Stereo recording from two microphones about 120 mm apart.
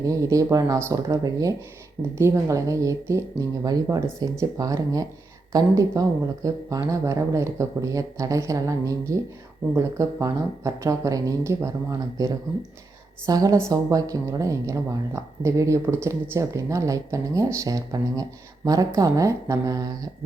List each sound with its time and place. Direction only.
0.0 s speech: 30° right (ahead or behind)